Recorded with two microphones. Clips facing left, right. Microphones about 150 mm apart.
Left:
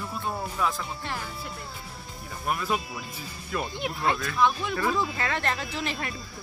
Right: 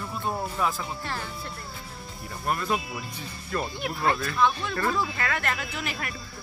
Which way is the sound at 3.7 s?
15° left (ahead or behind).